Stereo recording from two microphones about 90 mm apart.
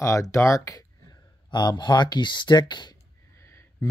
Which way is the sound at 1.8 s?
55° left (ahead or behind).